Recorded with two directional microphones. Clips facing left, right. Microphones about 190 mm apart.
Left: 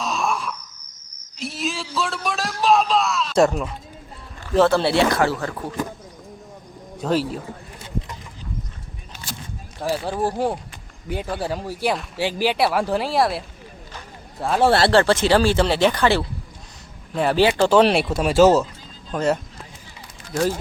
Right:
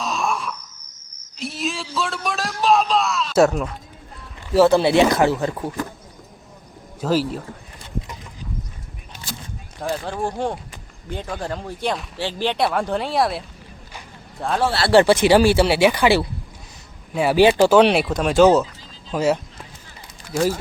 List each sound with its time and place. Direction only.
0.0 s wail: centre (ahead or behind)
1.4 s a man's voice: centre (ahead or behind); by 5.7 s 20° right (ahead or behind)
7.0 s speech: centre (ahead or behind)
9.8 s speech: 10° left (ahead or behind)
14.4 s speech: 5° left (ahead or behind)
14.9 s speech: 15° right (ahead or behind)